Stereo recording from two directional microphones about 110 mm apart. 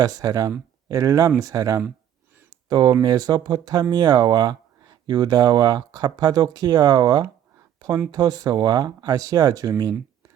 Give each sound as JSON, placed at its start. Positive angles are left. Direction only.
{"t": 0.0, "sound": "speech", "side_deg": -35}